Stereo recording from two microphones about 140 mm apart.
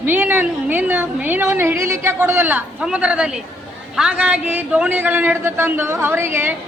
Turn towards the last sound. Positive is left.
turn(degrees=-15)  # may be behind; listen again after turning